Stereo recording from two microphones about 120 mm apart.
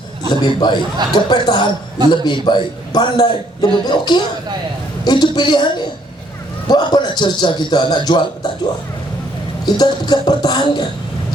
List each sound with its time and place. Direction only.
0.3 s a man's voice: 35° left (ahead or behind)
9.6 s a man's voice: 35° left (ahead or behind)